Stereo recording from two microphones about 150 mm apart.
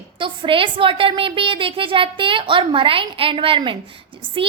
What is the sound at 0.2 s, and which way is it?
A woman's voice, 35° right (ahead or behind).